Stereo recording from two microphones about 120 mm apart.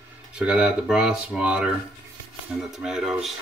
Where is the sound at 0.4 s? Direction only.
10° right (ahead or behind).